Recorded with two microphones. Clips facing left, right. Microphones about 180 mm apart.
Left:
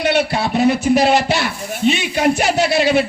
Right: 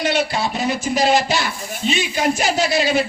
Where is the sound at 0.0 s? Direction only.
60° left (ahead or behind).